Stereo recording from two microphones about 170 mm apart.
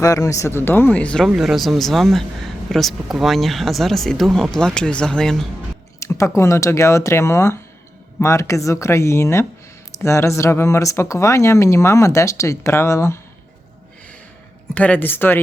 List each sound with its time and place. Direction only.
0.0 s speech: 20° left (ahead or behind); by 5.5 s 5° left (ahead or behind)
6.0 s speech: 20° left (ahead or behind)
14.8 s speech: 10° left (ahead or behind)